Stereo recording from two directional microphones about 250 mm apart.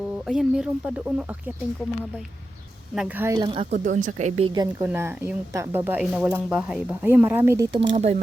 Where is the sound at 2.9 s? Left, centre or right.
Centre.